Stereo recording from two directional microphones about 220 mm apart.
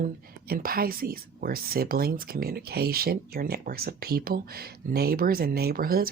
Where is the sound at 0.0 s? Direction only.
40° right (ahead or behind).